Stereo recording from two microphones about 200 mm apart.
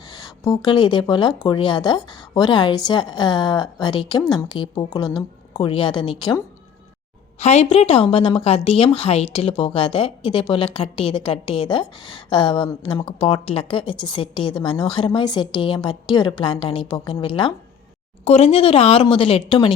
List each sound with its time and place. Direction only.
0.1 s a woman's voice: 20° left (ahead or behind)
7.3 s a woman's voice: 35° left (ahead or behind)